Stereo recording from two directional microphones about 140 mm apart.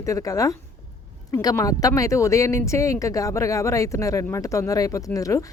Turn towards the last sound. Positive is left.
turn(degrees=25)  # may be behind; listen again after turning